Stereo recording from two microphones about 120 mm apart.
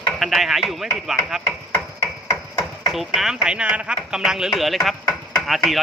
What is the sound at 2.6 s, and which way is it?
Speech, centre (ahead or behind).